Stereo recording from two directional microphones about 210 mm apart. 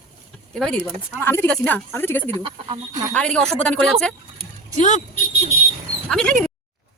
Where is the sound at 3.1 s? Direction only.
5° left (ahead or behind).